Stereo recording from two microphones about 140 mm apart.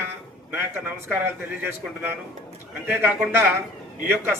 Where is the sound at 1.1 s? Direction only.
15° right (ahead or behind).